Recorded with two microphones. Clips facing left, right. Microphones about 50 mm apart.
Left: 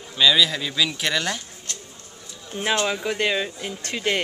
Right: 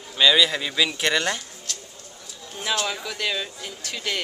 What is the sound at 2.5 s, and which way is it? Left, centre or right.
Speech, left.